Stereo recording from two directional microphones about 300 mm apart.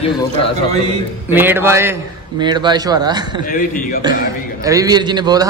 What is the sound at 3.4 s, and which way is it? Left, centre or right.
Speech, left.